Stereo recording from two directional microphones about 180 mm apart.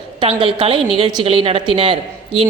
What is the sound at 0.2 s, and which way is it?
A woman's voice, 30° right (ahead or behind).